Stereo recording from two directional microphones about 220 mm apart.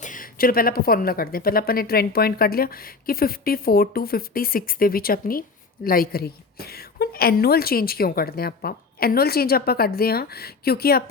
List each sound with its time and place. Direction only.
0.0 s a woman's voice: 35° left (ahead or behind)